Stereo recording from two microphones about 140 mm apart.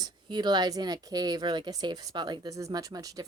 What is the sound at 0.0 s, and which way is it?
Speech, 30° right (ahead or behind).